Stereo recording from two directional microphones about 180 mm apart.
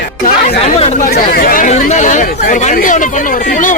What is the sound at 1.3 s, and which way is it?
Speech, 55° left (ahead or behind).